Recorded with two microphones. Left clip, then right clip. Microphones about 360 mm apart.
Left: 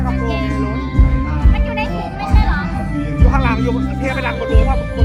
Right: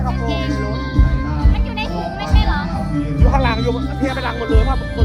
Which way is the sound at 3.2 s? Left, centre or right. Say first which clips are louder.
Even; right.